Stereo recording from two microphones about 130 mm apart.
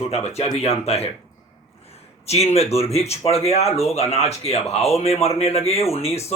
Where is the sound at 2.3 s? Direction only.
55° left (ahead or behind).